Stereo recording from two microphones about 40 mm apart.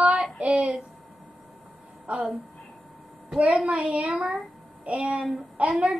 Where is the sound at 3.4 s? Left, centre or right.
Right.